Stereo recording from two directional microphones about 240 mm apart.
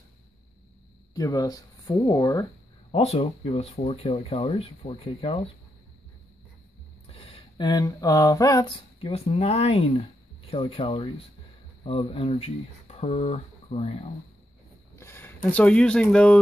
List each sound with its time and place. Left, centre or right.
1.1 s speech: centre
7.1 s speech: left
15.0 s speech: centre